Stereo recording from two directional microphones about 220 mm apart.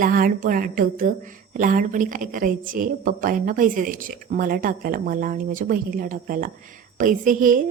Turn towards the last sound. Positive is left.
turn(degrees=-35)  # may be behind; listen again after turning